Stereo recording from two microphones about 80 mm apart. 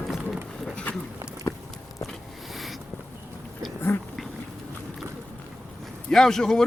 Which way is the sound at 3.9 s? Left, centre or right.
Left.